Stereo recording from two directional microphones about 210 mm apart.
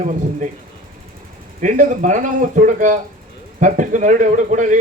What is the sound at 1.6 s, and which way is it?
A man's voice, 35° right (ahead or behind).